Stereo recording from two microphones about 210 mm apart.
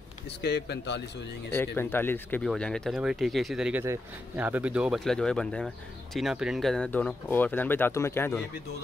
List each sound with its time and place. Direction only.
0.4 s speech: 55° left (ahead or behind)
1.5 s speech: 10° left (ahead or behind)